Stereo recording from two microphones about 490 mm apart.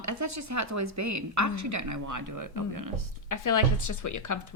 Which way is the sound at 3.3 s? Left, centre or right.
Left.